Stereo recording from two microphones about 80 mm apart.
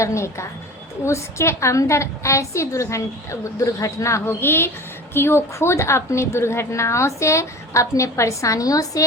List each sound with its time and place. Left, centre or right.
0.0 s a woman's voice: left
4.3 s a woman's voice: left